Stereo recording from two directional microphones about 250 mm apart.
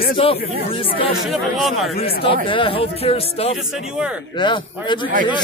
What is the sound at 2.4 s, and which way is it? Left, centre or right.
Speech, left.